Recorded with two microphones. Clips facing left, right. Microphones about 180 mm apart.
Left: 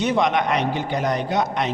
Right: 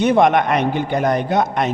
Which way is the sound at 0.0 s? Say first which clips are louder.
Right 6 dB; 55° right (ahead or behind).